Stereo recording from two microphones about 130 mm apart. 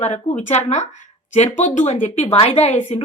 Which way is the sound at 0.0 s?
55° left (ahead or behind).